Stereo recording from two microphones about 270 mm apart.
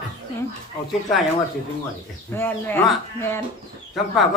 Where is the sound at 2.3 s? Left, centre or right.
Centre.